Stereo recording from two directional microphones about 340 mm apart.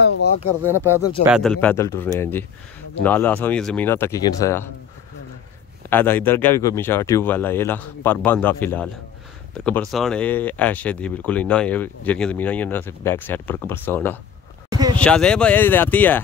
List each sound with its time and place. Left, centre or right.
0.2 s speech: left
0.7 s speech: centre
5.9 s speech: centre
14.7 s a sound: centre
15.0 s speech: centre